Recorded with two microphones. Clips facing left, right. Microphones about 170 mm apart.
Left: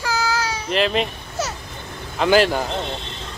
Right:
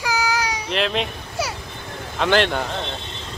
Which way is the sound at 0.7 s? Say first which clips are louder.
Left 3 dB; centre (ahead or behind).